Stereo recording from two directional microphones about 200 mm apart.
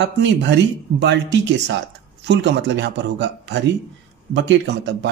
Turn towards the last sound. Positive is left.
turn(degrees=-60)  # may be behind; listen again after turning